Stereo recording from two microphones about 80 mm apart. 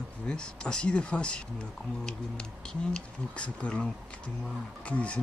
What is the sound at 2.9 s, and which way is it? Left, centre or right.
Speech, centre.